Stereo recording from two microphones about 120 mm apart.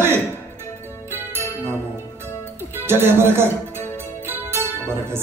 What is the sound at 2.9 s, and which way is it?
Music, 20° right (ahead or behind).